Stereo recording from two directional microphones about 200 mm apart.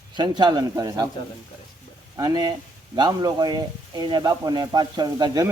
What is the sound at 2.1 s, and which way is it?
Speech, 20° right (ahead or behind).